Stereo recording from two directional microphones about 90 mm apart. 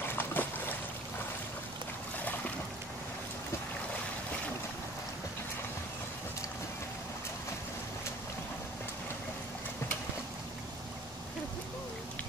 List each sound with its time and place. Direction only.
0.0 s boat: 25° left (ahead or behind)